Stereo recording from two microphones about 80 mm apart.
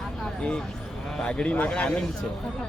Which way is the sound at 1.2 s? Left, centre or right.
Centre.